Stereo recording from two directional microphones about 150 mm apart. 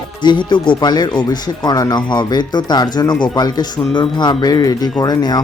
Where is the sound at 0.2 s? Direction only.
30° left (ahead or behind).